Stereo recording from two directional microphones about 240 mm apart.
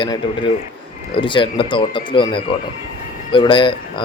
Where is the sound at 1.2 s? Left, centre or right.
Centre.